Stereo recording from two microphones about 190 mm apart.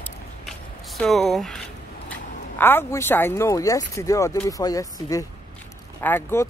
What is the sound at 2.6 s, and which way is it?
Speech, 10° left (ahead or behind).